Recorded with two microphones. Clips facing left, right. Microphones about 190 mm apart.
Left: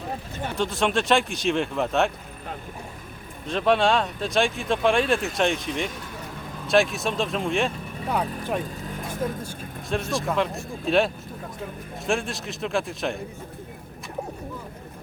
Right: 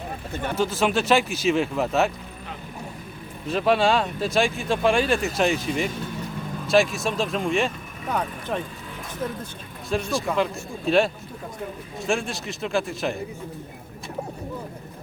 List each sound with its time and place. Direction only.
0.5 s speech: 5° right (ahead or behind)
3.4 s speech: 5° right (ahead or behind)
9.9 s speech: centre (ahead or behind)